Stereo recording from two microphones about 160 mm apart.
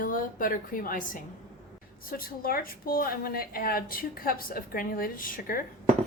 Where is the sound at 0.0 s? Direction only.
60° left (ahead or behind).